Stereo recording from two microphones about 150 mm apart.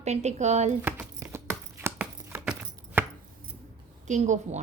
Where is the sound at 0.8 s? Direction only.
15° right (ahead or behind).